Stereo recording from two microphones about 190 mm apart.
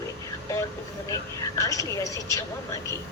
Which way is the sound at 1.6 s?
15° left (ahead or behind).